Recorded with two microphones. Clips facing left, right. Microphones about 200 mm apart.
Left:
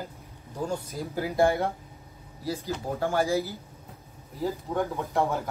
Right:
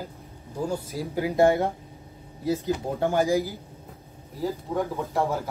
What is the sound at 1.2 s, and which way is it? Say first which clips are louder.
Speech: right 3 dB; 20° right (ahead or behind).